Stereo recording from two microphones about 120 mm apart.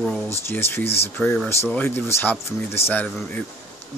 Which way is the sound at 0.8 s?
60° left (ahead or behind).